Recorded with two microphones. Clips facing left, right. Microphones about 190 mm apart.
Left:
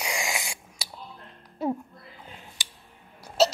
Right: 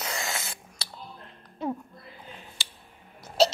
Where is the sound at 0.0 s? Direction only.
15° left (ahead or behind).